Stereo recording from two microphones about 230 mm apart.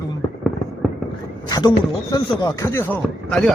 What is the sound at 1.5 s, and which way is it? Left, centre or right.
Speech, centre.